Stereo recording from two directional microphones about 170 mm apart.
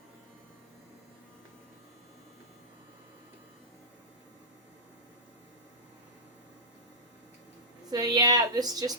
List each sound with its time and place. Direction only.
7.9 s a woman's voice: 20° right (ahead or behind)